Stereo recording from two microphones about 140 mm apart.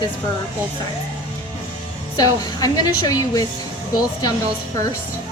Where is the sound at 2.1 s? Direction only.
25° left (ahead or behind).